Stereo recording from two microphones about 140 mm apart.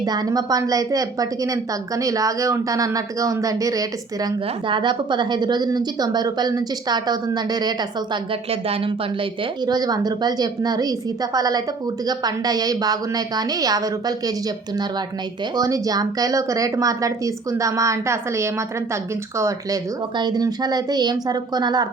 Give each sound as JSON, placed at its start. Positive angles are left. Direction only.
{"t": 0.0, "sound": "speech", "side_deg": -30}
{"t": 8.4, "sound": "speech", "side_deg": -45}
{"t": 9.6, "sound": "speech", "side_deg": -30}
{"t": 15.5, "sound": "speech", "side_deg": -25}